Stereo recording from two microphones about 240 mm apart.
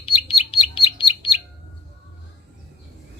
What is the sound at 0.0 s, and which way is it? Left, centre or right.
Bird, left.